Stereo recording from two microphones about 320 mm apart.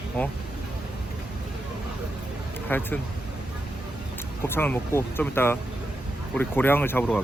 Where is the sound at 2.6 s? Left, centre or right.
Centre.